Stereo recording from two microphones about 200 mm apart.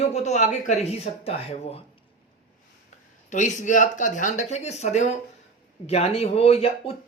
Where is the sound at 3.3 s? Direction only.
40° left (ahead or behind).